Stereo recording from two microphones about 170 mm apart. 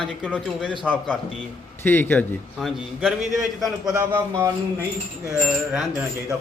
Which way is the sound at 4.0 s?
15° right (ahead or behind).